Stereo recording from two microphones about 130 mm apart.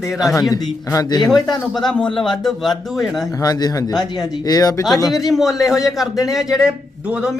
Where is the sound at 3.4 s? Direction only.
30° left (ahead or behind).